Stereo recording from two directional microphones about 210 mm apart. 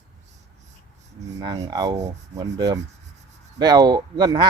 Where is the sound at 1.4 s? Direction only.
15° right (ahead or behind).